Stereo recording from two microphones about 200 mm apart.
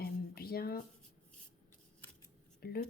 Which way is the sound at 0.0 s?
50° left (ahead or behind).